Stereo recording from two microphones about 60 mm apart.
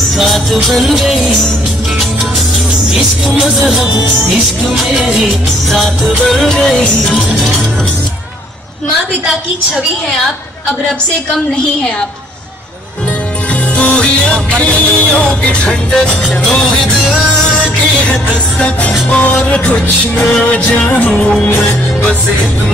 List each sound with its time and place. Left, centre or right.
0.2 s music: centre
2.9 s music: centre
4.9 s music: centre
5.7 s music: centre
11.3 s music: centre
13.7 s music: centre
18.6 s music: left
21.1 s music: centre